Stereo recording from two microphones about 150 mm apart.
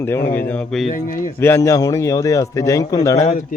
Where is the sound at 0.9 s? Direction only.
65° left (ahead or behind).